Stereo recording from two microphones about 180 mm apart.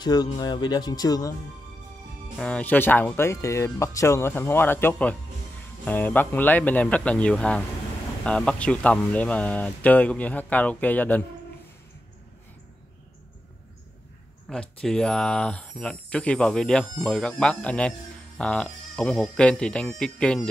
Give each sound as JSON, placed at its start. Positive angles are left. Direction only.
{"t": 0.0, "sound": "speech", "side_deg": 20}
{"t": 2.3, "sound": "speech", "side_deg": 5}
{"t": 14.5, "sound": "speech", "side_deg": 5}